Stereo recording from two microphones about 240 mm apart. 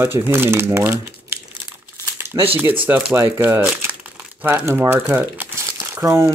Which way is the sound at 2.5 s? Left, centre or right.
Centre.